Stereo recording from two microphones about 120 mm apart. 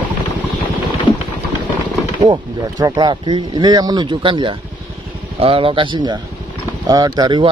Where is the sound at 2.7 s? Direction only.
30° right (ahead or behind).